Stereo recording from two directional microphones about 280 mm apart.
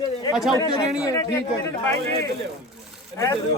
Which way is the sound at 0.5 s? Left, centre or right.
Centre.